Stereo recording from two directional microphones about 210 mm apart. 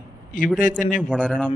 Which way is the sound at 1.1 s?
5° left (ahead or behind).